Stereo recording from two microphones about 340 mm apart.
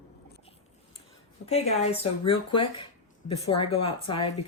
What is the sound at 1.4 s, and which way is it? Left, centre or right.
Speech, centre.